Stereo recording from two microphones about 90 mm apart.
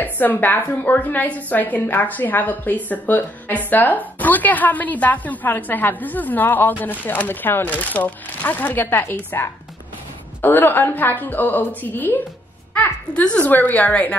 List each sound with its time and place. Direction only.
0.0 s a woman's voice: 20° left (ahead or behind)